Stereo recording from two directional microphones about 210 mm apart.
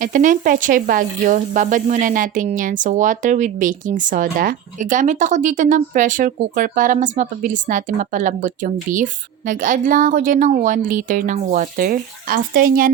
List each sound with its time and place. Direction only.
0.0 s speech: 40° right (ahead or behind)